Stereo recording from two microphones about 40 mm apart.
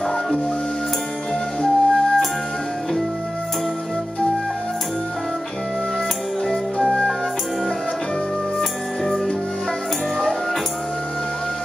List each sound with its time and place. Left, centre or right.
1.6 s flute: centre
8.5 s music: centre